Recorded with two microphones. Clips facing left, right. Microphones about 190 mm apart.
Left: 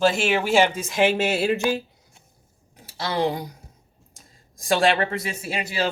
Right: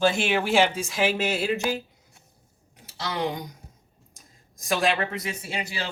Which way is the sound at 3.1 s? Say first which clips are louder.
Left 5 dB; 30° left (ahead or behind).